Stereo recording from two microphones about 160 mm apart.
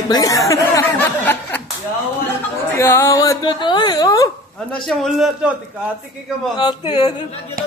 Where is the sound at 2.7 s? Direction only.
15° left (ahead or behind).